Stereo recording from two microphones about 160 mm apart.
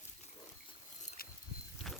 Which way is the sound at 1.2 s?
70° left (ahead or behind).